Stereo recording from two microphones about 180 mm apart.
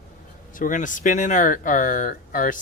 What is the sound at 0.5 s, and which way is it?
Speech, 45° left (ahead or behind).